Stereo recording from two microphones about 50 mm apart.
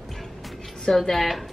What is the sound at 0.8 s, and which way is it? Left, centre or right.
Speech, centre.